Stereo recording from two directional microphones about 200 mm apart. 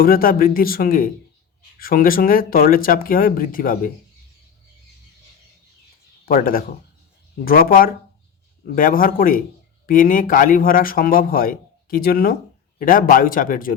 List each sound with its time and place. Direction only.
0.0 s speech: 45° left (ahead or behind)
6.2 s speech: 45° left (ahead or behind)